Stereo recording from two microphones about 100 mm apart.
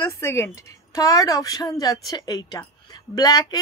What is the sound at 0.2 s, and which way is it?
Speech, 25° left (ahead or behind).